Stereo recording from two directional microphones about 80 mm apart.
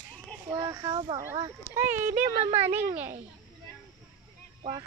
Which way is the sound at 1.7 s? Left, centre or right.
Right.